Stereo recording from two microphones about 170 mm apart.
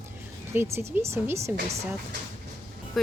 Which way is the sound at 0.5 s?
15° right (ahead or behind).